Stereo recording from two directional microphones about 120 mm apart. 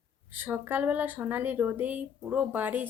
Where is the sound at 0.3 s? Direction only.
15° right (ahead or behind).